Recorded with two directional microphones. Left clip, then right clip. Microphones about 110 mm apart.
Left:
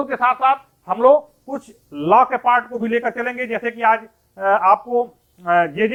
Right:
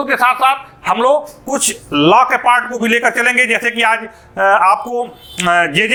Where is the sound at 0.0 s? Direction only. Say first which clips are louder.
Right 5 dB; 15° right (ahead or behind).